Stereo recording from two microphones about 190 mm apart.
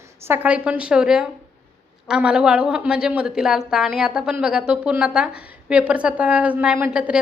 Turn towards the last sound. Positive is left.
turn(degrees=-5)  # may be behind; listen again after turning